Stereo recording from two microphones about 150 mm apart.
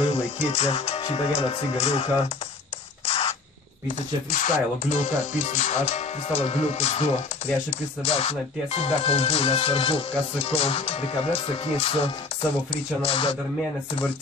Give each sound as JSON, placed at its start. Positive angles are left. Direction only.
{"t": 0.4, "sound": "speech", "side_deg": 45}
{"t": 3.1, "sound": "spray", "side_deg": 40}
{"t": 4.3, "sound": "speech", "side_deg": 55}